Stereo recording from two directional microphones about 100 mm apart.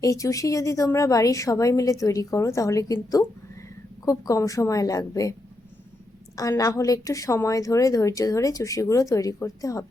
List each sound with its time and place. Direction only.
0.0 s a woman's voice: 35° left (ahead or behind)
6.3 s a woman's voice: 35° left (ahead or behind)